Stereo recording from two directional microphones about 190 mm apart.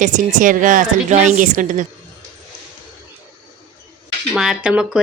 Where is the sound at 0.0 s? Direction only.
40° right (ahead or behind).